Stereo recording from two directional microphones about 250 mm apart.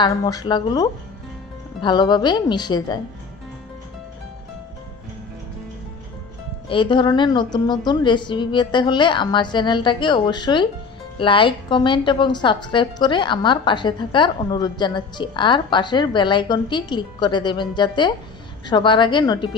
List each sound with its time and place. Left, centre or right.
0.0 s speech: centre
6.7 s a woman's voice: centre